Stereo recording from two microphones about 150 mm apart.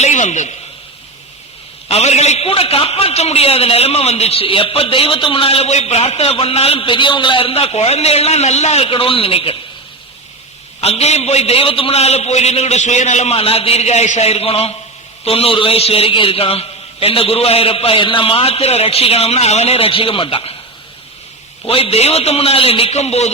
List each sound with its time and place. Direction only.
0.0 s a man's voice: 55° left (ahead or behind)
1.9 s a man's voice: 45° left (ahead or behind)
10.8 s a man's voice: 45° left (ahead or behind)
21.7 s a man's voice: 40° left (ahead or behind)